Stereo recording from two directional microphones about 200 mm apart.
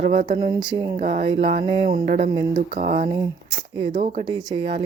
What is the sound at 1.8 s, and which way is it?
Speech, 40° right (ahead or behind).